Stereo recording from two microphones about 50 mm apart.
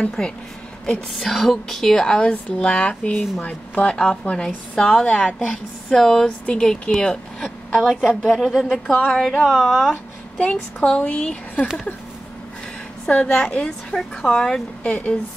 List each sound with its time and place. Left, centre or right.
0.2 s speech: centre
3.1 s a woman's voice: left
3.4 s speech: left
5.5 s speech: centre
6.2 s speech: left
6.6 s a woman's voice: centre
9.1 s speech: centre
9.6 s speech: centre
10.4 s speech: left
13.1 s speech: left
14.8 s speech: left